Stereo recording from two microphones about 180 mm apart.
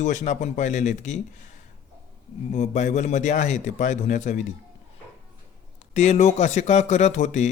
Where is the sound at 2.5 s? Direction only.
40° left (ahead or behind).